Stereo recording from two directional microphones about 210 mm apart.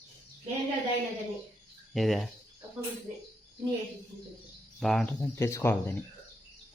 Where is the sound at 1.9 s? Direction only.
Centre (ahead or behind).